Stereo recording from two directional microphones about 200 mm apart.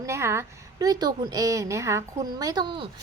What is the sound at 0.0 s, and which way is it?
A woman's voice, 15° right (ahead or behind).